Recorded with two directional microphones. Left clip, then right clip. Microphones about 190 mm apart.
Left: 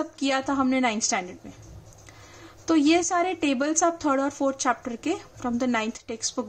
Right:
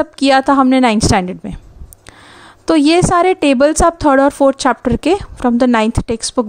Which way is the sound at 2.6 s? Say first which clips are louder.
Right 10 dB; 50° right (ahead or behind).